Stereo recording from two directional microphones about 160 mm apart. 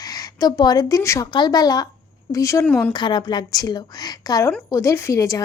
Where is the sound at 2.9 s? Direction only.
30° left (ahead or behind).